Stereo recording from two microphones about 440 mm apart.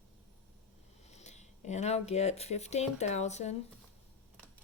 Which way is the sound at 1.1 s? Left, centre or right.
Centre.